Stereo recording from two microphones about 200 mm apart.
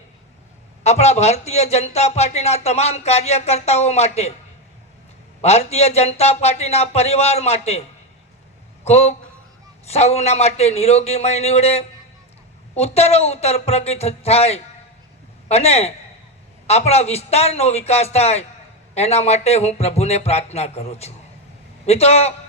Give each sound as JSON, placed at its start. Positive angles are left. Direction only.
{"t": 0.9, "sound": "speech", "side_deg": 35}
{"t": 5.4, "sound": "speech", "side_deg": 30}
{"t": 8.8, "sound": "a man's voice", "side_deg": 30}